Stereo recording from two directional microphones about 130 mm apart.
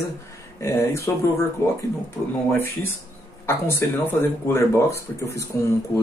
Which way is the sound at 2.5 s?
15° left (ahead or behind).